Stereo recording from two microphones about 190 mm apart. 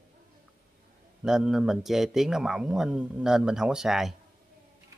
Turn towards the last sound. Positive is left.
turn(degrees=0)  # may be behind; listen again after turning